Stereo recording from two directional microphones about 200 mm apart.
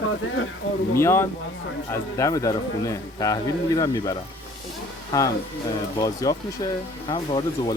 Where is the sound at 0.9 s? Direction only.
10° left (ahead or behind).